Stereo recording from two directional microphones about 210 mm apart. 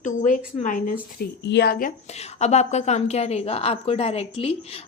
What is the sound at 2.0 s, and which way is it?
A woman's voice, 30° left (ahead or behind).